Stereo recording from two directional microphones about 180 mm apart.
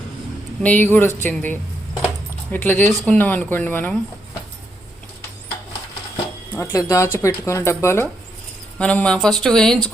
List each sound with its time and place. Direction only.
0.6 s speech: 10° left (ahead or behind)
6.6 s speech: 20° left (ahead or behind)